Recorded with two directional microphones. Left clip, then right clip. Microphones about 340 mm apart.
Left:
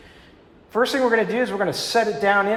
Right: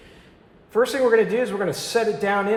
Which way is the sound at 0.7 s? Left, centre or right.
Centre.